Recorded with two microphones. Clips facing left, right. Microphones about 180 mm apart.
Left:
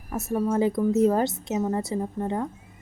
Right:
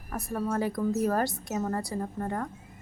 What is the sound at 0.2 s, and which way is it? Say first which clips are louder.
Speech: left 6 dB; 25° left (ahead or behind).